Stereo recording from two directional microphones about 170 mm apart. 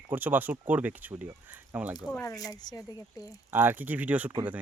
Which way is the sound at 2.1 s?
15° left (ahead or behind).